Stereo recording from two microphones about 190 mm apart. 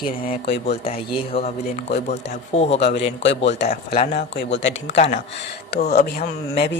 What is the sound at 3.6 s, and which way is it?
Speech, 55° left (ahead or behind).